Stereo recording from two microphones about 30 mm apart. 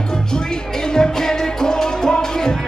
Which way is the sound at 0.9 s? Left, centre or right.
Left.